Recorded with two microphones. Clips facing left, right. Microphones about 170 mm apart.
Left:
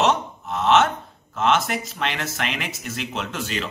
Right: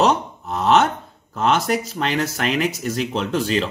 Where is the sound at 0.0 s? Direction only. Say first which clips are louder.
Right 3 dB; 35° right (ahead or behind).